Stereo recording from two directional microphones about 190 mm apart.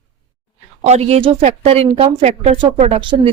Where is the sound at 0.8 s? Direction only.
35° right (ahead or behind).